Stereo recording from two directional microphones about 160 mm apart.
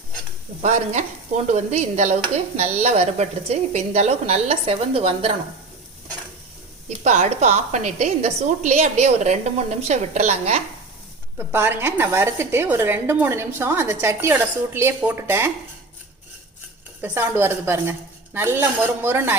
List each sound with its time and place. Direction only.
0.6 s stir: 50° right (ahead or behind)
6.8 s stir: 45° right (ahead or behind)
11.3 s a woman's voice: 15° right (ahead or behind)
17.0 s a woman's voice: 15° right (ahead or behind)